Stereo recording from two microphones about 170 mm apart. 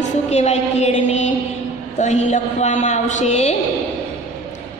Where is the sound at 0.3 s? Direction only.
40° left (ahead or behind).